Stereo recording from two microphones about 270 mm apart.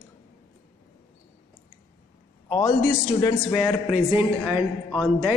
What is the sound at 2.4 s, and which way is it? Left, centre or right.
A man's voice, centre.